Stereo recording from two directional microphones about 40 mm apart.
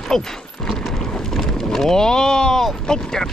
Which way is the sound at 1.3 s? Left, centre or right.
Centre.